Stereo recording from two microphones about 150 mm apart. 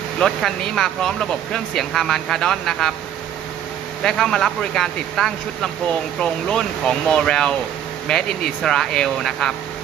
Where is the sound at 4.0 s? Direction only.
5° left (ahead or behind).